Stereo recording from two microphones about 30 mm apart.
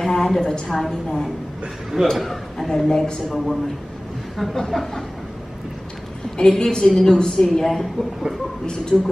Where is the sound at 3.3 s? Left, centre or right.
Centre.